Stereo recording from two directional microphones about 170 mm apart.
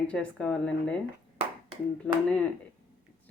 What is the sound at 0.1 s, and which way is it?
Speech, 5° left (ahead or behind).